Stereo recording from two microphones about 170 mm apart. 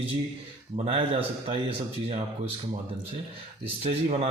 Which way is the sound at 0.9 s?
35° right (ahead or behind).